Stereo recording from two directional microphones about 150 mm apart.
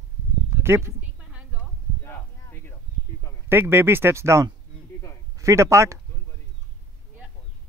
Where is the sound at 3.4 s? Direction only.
15° right (ahead or behind).